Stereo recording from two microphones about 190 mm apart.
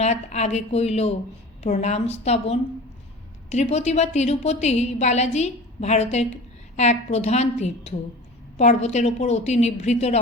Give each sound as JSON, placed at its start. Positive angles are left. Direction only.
{"t": 0.0, "sound": "a woman's voice", "side_deg": 35}